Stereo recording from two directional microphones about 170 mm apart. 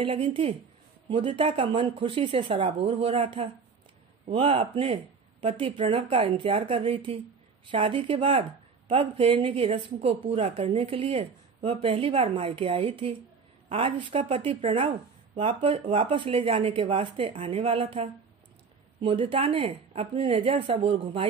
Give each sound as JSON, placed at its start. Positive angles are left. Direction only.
{"t": 0.0, "sound": "speech", "side_deg": -35}